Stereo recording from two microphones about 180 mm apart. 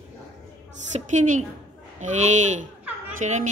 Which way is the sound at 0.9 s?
40° right (ahead or behind).